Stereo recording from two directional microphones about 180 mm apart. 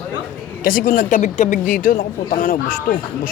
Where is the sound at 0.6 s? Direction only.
55° left (ahead or behind).